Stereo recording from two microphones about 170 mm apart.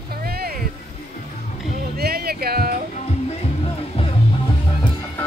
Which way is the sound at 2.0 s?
65° right (ahead or behind).